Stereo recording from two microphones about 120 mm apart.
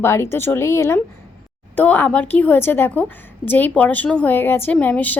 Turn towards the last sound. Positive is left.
turn(degrees=15)  # may be behind; listen again after turning